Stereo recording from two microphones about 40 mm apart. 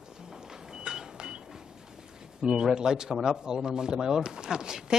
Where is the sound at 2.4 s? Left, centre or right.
Centre.